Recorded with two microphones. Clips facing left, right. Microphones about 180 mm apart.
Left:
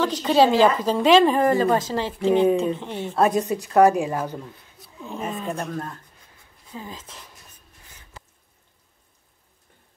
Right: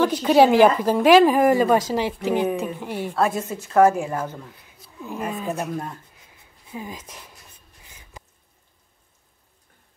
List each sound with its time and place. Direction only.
0.0 s a woman's voice: 10° right (ahead or behind)
2.2 s speech: 25° left (ahead or behind)
2.8 s a woman's voice: 10° right (ahead or behind)
3.2 s speech: 15° left (ahead or behind)
5.0 s a woman's voice: 10° right (ahead or behind)
7.8 s a sound: 15° right (ahead or behind)